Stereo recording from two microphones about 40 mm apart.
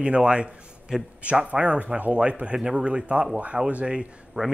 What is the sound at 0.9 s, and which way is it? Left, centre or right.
Speech, centre.